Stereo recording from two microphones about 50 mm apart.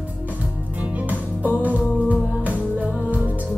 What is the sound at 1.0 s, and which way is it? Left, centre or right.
Music, right.